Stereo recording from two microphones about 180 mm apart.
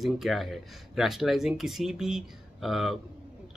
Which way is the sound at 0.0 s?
Centre (ahead or behind).